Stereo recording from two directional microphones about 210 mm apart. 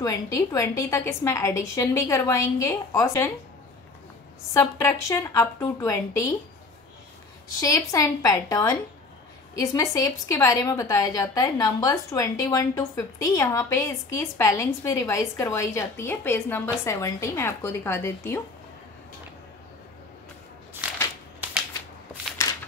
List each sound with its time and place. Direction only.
0.0 s a woman's voice: 15° left (ahead or behind)
4.6 s a woman's voice: 15° left (ahead or behind)
7.6 s a woman's voice: 15° left (ahead or behind)
20.8 s crushing: 5° right (ahead or behind)